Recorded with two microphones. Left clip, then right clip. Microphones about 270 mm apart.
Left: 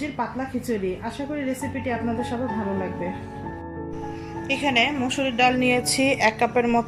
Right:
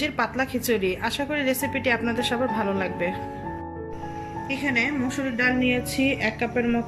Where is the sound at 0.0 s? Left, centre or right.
Right.